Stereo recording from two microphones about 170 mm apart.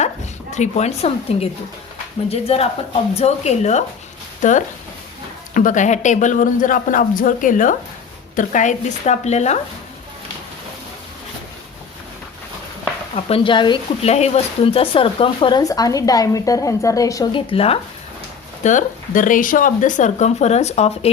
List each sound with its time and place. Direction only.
0.5 s speech: 40° left (ahead or behind)
13.1 s speech: 35° left (ahead or behind)
18.6 s speech: 45° left (ahead or behind)